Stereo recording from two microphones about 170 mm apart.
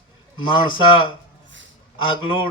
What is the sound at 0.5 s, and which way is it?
Speech, 30° left (ahead or behind).